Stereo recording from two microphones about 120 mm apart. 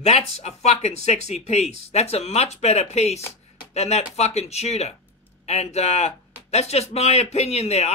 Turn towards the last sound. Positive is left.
turn(degrees=65)  # may be behind; listen again after turning